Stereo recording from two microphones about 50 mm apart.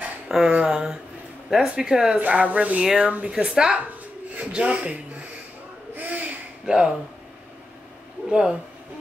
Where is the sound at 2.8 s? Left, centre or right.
Centre.